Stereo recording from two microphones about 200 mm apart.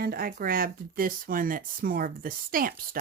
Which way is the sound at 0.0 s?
50° right (ahead or behind).